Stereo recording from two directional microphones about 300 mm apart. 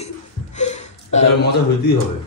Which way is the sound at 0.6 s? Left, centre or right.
Left.